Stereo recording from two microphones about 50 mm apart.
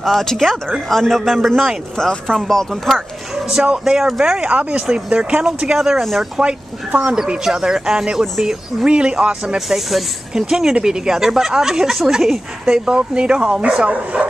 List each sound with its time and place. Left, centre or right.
0.0 s a man's voice: centre
3.8 s speech: centre
4.4 s speech: right
5.8 s speech: centre
7.2 s speech: centre
8.8 s speech: centre
9.7 s a man's voice: centre; by 14.2 s right